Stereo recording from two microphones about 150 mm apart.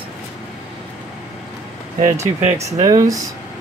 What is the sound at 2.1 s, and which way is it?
Speech, 20° right (ahead or behind).